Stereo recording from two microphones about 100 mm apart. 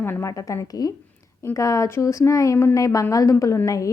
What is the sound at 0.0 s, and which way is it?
Speech, 25° left (ahead or behind).